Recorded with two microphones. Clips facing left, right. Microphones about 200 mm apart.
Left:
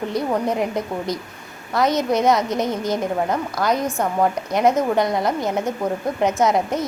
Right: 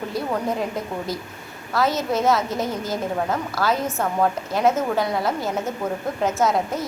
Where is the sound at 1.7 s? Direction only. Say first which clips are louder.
Left 3 dB; 15° left (ahead or behind).